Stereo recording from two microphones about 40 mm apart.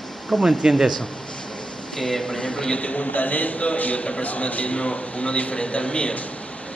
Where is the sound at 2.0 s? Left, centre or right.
Centre.